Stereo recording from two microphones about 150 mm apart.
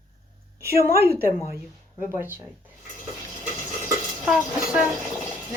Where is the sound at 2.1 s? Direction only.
15° right (ahead or behind).